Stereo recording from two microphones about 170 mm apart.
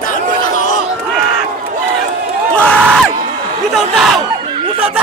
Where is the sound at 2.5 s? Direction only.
5° left (ahead or behind).